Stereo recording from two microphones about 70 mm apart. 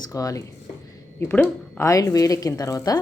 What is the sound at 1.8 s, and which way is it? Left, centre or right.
Speech, left.